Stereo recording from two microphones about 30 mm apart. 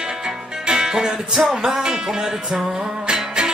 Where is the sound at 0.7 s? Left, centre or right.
Right.